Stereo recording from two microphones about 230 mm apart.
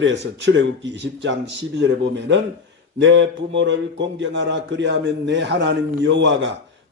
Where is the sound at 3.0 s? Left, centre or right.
Right.